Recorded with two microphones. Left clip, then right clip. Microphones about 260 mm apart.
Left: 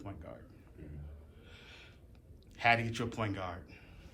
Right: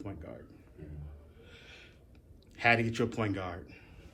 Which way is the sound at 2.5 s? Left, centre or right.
Centre.